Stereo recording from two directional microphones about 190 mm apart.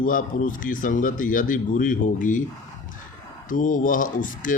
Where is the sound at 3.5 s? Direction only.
45° left (ahead or behind).